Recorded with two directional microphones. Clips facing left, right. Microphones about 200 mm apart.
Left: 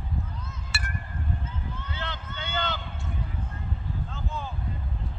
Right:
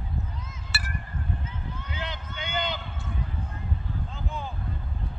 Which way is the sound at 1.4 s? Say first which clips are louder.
Even; 15° right (ahead or behind).